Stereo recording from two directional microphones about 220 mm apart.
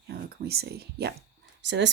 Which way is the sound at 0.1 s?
45° right (ahead or behind).